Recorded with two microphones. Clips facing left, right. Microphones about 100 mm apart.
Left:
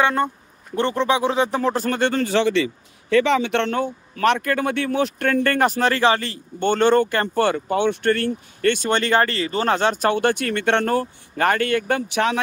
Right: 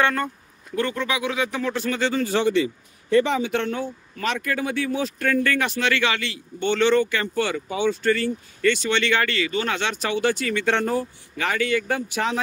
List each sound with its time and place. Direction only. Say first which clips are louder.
0.0 s speech: left 3 dB; 20° left (ahead or behind); by 11.1 s 65° left (ahead or behind)
11.3 s speech: left 4 dB; 50° left (ahead or behind); by 12.4 s 70° left (ahead or behind)